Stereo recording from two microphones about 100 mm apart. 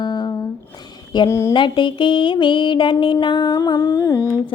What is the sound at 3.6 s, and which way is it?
Humming, 30° left (ahead or behind).